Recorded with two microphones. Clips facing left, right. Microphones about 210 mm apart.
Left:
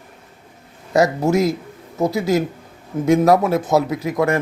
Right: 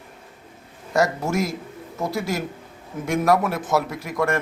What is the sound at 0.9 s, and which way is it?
Speech, 20° left (ahead or behind).